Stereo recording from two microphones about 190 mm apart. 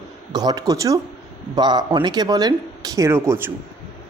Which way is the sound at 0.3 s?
20° right (ahead or behind).